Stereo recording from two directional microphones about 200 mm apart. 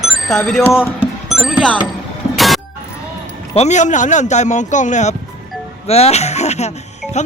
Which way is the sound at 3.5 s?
35° left (ahead or behind).